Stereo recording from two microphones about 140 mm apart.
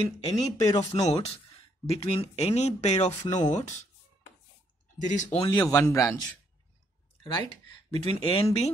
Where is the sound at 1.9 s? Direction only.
45° left (ahead or behind).